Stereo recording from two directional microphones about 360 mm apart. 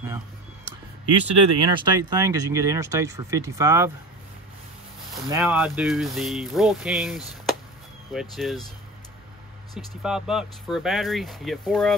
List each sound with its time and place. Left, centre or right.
1.0 s speech: right
1.9 s speech: centre
5.1 s speech: centre
10.0 s speech: centre